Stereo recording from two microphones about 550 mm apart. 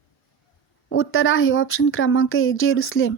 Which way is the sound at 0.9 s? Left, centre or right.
Left.